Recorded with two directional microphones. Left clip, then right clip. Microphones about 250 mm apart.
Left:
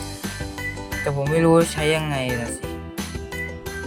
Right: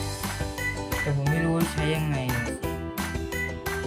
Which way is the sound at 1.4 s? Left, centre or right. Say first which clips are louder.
Left 13 dB; centre.